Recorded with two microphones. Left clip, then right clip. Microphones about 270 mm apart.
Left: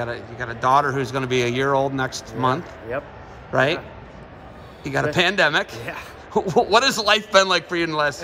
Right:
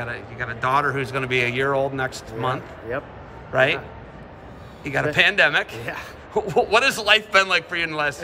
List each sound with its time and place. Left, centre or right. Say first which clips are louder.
0.0 s a man's voice: left 1 dB; centre
2.9 s speech: left 1 dB; centre
3.5 s a man's voice: right 1 dB; left
4.8 s a man's voice: right 1 dB; left